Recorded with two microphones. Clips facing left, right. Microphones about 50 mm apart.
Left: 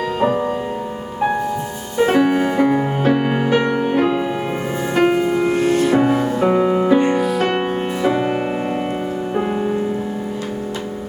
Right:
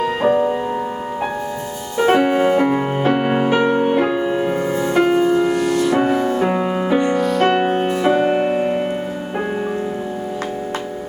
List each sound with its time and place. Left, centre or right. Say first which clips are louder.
0.2 s music: right 2 dB; centre
2.1 s music: right 2 dB; right
4.9 s music: right 1 dB; left
6.0 s music: left 1 dB; centre
6.2 s music: left 2 dB; centre
7.2 s music: right 2 dB; centre